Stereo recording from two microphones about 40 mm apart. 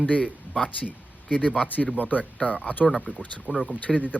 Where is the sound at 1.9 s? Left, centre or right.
Left.